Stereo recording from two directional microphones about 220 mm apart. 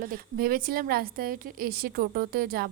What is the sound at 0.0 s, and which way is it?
A woman's voice, 40° right (ahead or behind).